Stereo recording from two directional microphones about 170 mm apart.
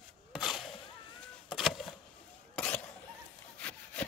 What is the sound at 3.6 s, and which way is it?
Sawing, 10° left (ahead or behind).